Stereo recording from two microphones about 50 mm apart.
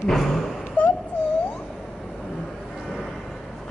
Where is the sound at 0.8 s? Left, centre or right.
Left.